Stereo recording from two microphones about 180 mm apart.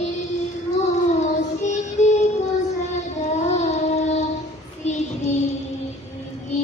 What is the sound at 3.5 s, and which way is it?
Child singing, 40° left (ahead or behind).